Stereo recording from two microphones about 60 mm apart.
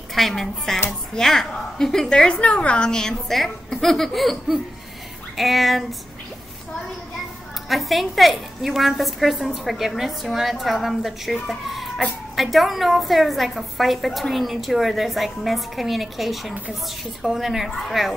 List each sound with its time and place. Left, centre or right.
0.1 s a woman's voice: centre
7.6 s a woman's voice: centre